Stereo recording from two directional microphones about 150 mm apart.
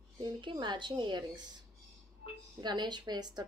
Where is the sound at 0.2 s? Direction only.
30° right (ahead or behind).